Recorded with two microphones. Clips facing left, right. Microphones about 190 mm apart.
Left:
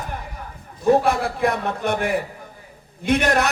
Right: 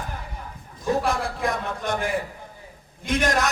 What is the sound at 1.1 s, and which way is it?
A man's voice, 65° left (ahead or behind).